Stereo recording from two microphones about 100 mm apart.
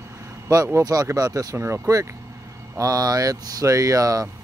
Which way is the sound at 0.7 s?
35° right (ahead or behind).